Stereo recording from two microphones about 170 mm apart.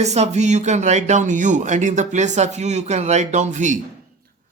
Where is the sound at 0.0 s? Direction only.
40° right (ahead or behind).